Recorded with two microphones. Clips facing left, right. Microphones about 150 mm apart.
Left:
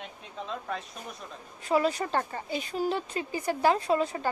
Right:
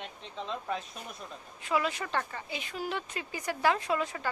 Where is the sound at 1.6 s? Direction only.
35° left (ahead or behind).